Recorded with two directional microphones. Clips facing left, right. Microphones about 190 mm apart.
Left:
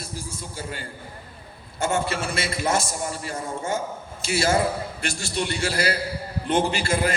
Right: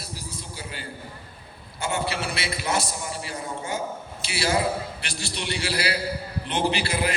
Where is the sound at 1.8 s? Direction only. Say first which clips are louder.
Left 3 dB; 45° left (ahead or behind).